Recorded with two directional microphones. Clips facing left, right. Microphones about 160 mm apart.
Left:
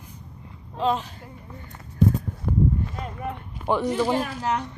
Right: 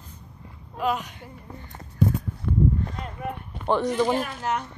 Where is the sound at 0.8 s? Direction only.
30° left (ahead or behind).